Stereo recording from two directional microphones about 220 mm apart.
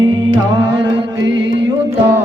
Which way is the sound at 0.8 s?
55° right (ahead or behind).